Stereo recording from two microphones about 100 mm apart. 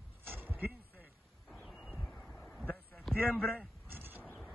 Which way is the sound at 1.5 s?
5° right (ahead or behind).